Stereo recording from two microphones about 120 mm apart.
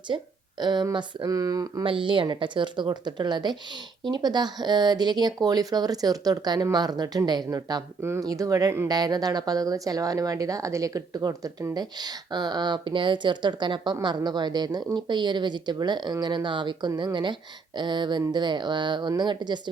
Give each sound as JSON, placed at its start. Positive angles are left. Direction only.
{"t": 0.6, "sound": "a woman's voice", "side_deg": -40}
{"t": 1.8, "sound": "a woman's voice", "side_deg": -45}